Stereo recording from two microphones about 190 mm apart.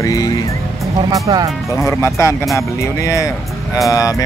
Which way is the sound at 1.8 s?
15° left (ahead or behind).